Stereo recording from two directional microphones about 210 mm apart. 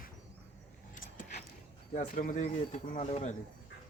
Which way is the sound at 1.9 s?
40° left (ahead or behind).